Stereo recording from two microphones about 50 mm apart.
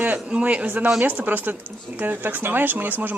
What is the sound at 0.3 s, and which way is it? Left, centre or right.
A man's voice, right.